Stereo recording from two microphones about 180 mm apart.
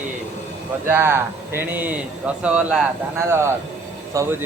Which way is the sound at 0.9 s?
15° right (ahead or behind).